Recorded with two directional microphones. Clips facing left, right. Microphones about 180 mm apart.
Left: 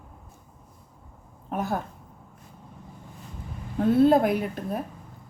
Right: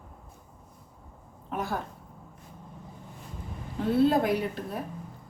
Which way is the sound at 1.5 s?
45° left (ahead or behind).